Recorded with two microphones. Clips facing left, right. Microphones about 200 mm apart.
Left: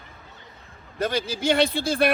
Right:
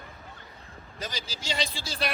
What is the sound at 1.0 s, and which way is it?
Speech, 55° left (ahead or behind).